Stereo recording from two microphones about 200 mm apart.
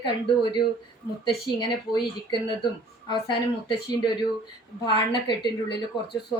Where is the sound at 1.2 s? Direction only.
20° left (ahead or behind).